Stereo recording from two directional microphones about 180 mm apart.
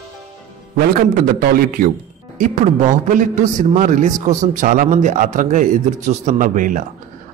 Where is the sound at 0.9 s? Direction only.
55° right (ahead or behind).